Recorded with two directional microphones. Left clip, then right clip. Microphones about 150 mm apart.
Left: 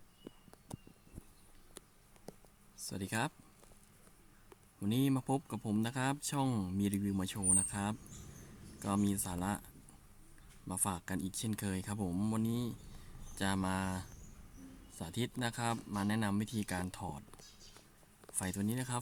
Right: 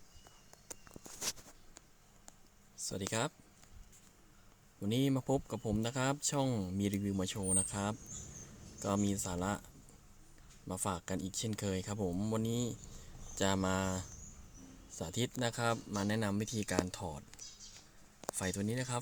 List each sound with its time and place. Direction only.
2.7 s speech: 10° right (ahead or behind)
4.8 s speech: 10° right (ahead or behind)
10.7 s speech: 10° right (ahead or behind)
12.4 s speech: 20° right (ahead or behind)
18.3 s speech: 15° right (ahead or behind)